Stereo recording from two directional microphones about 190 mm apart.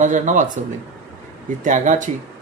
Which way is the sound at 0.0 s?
40° right (ahead or behind).